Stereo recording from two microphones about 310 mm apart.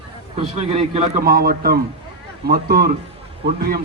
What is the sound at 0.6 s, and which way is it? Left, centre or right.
A man's voice, centre.